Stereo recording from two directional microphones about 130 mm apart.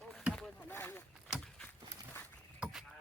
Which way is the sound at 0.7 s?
15° left (ahead or behind).